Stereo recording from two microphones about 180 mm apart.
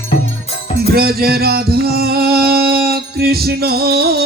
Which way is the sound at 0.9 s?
60° right (ahead or behind).